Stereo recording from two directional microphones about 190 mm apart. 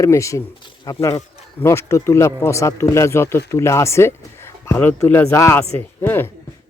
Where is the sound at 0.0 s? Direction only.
15° left (ahead or behind).